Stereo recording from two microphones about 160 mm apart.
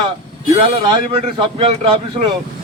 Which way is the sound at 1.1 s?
35° right (ahead or behind).